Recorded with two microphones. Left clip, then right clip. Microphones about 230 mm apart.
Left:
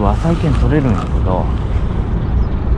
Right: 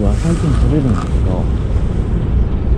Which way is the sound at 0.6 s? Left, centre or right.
Centre.